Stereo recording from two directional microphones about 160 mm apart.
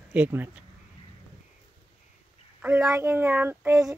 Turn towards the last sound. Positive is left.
turn(degrees=-15)  # may be behind; listen again after turning